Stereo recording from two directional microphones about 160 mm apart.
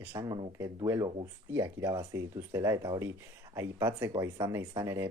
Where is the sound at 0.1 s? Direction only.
25° right (ahead or behind).